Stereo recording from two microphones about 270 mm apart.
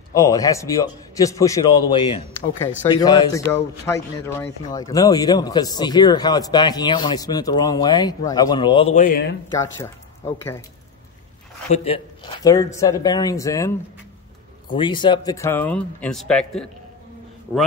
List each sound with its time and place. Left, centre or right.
0.1 s speech: centre; by 9.4 s left
9.6 s speech: centre
11.7 s speech: left; by 16.6 s centre